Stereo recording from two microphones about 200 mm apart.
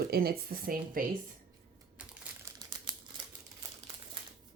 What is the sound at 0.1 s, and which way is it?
Speech, 50° right (ahead or behind).